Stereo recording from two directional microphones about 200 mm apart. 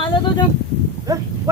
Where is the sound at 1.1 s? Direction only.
15° right (ahead or behind).